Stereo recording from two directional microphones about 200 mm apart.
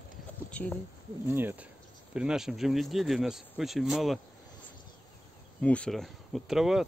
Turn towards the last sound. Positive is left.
turn(degrees=0)  # may be behind; listen again after turning